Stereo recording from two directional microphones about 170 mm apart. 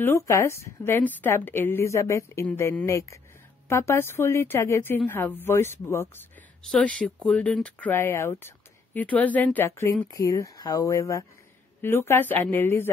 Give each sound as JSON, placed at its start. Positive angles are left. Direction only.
{"t": 0.0, "sound": "speech", "side_deg": 15}